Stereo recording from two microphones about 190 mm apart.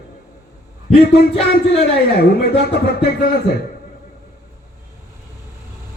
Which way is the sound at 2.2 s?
55° left (ahead or behind).